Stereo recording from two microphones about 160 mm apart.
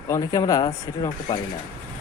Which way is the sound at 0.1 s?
20° left (ahead or behind).